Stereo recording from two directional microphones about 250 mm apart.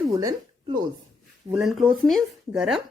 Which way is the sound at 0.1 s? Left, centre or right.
Centre.